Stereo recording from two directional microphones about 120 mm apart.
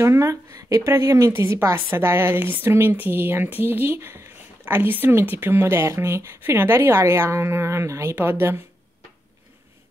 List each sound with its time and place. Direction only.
0.0 s a woman's voice: 20° right (ahead or behind)